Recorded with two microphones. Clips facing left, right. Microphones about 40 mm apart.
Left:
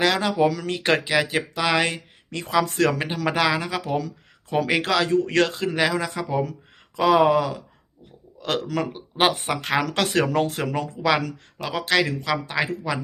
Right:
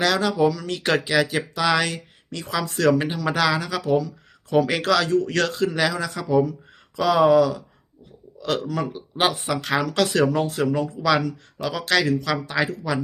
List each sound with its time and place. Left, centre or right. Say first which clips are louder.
0.0 s speech: even; left
0.4 s speech: even; left
0.7 s speech: left 1 dB; left
1.1 s speech: right 1 dB; centre; by 3.0 s left
3.2 s speech: left 2 dB; left
11.5 s speech: even; left